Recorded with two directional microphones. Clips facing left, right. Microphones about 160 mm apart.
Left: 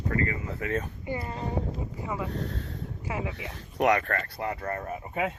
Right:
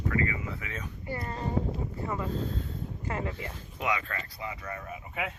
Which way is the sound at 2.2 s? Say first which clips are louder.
Right 1 dB; 70° left (ahead or behind).